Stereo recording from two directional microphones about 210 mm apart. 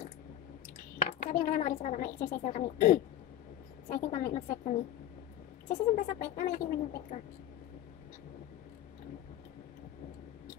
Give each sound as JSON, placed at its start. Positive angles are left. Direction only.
{"t": 1.2, "sound": "a woman's voice", "side_deg": 40}